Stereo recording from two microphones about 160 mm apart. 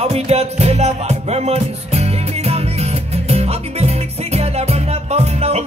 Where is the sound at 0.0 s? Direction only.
40° right (ahead or behind).